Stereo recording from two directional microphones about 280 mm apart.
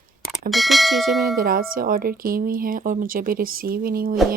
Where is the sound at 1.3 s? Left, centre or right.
Right.